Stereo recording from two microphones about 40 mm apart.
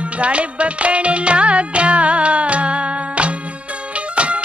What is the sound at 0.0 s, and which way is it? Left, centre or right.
Music, right.